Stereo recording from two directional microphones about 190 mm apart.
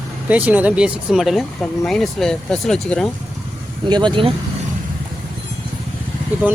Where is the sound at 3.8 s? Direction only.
25° right (ahead or behind).